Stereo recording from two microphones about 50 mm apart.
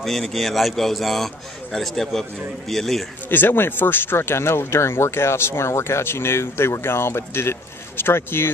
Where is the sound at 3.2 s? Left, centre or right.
Left.